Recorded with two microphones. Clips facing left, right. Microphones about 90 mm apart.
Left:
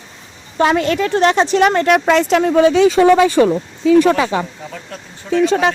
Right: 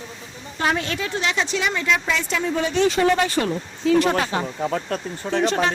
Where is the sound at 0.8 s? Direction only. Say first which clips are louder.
Left 11 dB; 60° left (ahead or behind).